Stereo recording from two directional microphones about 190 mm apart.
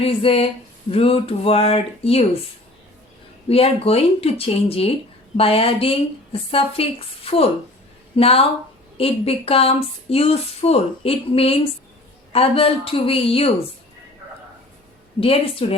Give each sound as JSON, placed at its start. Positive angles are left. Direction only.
{"t": 0.0, "sound": "a woman's voice", "side_deg": 30}
{"t": 3.5, "sound": "a woman's voice", "side_deg": 30}
{"t": 15.2, "sound": "a woman's voice", "side_deg": 30}